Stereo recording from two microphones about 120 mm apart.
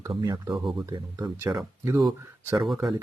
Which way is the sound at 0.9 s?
35° right (ahead or behind).